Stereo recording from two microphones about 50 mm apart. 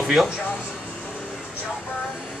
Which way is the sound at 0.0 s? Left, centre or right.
Centre.